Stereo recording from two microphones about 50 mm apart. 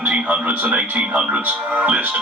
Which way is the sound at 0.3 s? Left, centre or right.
Right.